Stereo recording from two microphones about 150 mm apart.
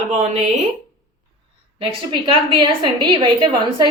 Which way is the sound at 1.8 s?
35° right (ahead or behind).